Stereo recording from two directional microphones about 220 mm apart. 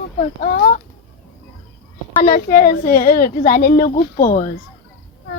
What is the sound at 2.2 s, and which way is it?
Speech, 40° left (ahead or behind).